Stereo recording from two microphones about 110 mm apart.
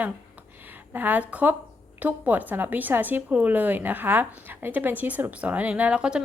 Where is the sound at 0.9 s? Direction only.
15° right (ahead or behind).